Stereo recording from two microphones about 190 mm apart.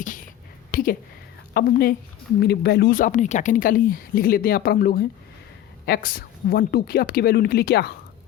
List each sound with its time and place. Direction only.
0.7 s speech: 50° left (ahead or behind)